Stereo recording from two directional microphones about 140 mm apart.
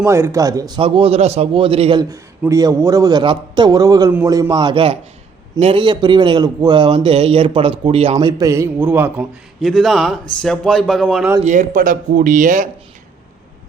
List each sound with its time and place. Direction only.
0.0 s a man's voice: 20° right (ahead or behind)
0.8 s a man's voice: 40° right (ahead or behind)
2.5 s a man's voice: 25° right (ahead or behind)
8.4 s a man's voice: 20° right (ahead or behind)
9.6 s a man's voice: centre (ahead or behind)
11.4 s speech: 60° right (ahead or behind)